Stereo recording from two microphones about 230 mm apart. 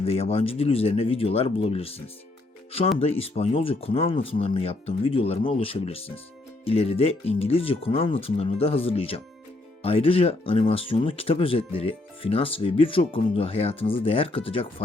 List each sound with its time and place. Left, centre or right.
0.0 s speech: left
3.0 s speech: left